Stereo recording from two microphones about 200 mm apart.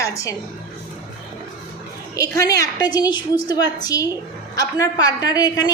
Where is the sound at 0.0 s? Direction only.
15° left (ahead or behind).